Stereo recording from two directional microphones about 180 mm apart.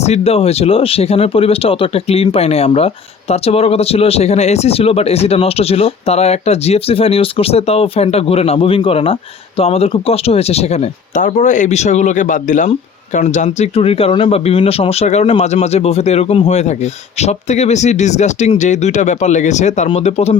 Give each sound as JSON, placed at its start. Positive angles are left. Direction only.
{"t": 0.0, "sound": "speech", "side_deg": 35}